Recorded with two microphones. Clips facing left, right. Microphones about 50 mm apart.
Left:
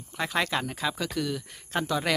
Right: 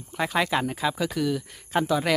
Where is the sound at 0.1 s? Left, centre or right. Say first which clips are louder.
Right 3 dB; centre.